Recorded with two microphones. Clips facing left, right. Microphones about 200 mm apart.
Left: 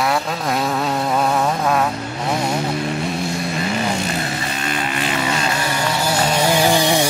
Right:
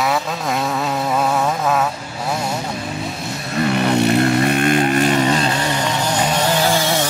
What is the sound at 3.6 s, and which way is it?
Vehicle, 65° right (ahead or behind).